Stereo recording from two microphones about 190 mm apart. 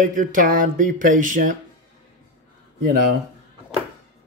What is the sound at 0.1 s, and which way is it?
Speech, 45° right (ahead or behind).